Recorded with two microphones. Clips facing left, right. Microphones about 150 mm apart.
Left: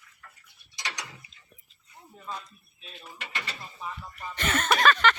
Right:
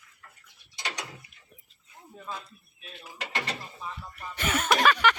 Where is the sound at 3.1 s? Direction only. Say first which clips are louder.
Right 5 dB; 65° right (ahead or behind).